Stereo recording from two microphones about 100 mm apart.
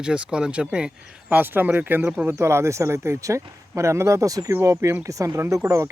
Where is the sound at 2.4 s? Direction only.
30° right (ahead or behind).